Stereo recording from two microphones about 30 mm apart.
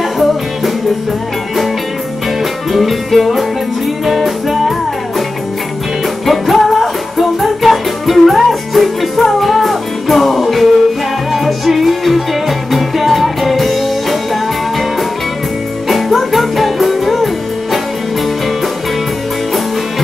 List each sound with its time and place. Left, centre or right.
2.7 s music: centre
6.2 s music: centre